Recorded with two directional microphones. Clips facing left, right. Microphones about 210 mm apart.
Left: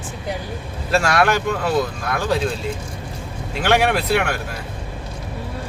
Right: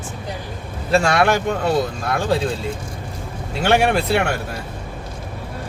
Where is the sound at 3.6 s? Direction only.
30° right (ahead or behind).